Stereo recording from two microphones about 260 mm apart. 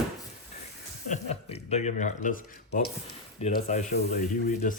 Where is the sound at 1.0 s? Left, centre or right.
Left.